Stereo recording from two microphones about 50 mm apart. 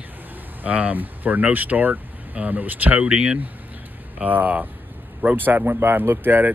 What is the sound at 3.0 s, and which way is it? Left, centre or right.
Speech, centre.